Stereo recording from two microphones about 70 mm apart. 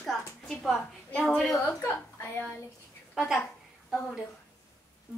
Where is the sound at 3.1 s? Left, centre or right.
Centre.